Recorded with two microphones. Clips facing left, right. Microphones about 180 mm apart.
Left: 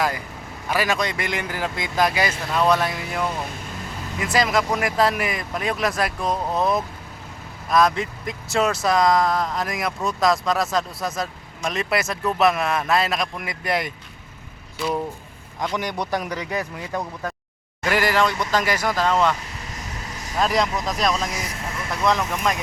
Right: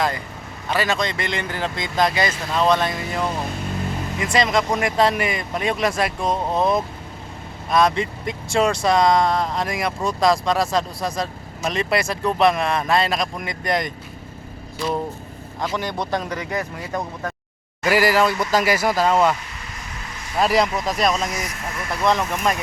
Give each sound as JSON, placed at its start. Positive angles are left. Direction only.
{"t": 0.7, "sound": "speech", "side_deg": 10}
{"t": 15.7, "sound": "speech", "side_deg": 15}
{"t": 17.8, "sound": "speech", "side_deg": -5}
{"t": 20.4, "sound": "speech", "side_deg": -5}
{"t": 21.3, "sound": "speech", "side_deg": 30}
{"t": 22.0, "sound": "speech", "side_deg": 0}